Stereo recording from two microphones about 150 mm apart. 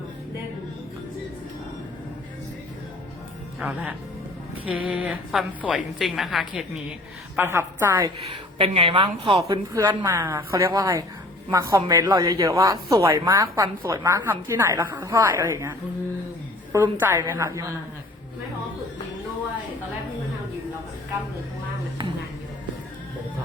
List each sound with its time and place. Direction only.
3.6 s a woman's voice: 10° right (ahead or behind)
7.3 s a woman's voice: 15° right (ahead or behind)
8.3 s a woman's voice: 40° right (ahead or behind)
9.4 s speech: 20° right (ahead or behind)
16.7 s a woman's voice: 15° right (ahead or behind)